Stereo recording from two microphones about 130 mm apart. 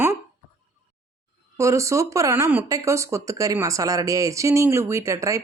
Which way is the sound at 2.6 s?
25° right (ahead or behind).